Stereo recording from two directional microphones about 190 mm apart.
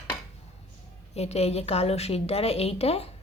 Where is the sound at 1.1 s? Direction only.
35° left (ahead or behind).